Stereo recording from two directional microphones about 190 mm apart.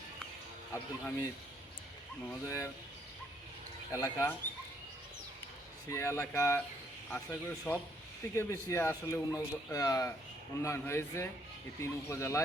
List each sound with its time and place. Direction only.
0.7 s a man's voice: 15° left (ahead or behind)
2.3 s a man's voice: 15° left (ahead or behind)
3.9 s a man's voice: 15° left (ahead or behind)
5.9 s a man's voice: 15° left (ahead or behind)